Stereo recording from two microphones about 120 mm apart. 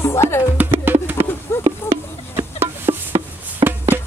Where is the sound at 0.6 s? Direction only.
15° right (ahead or behind).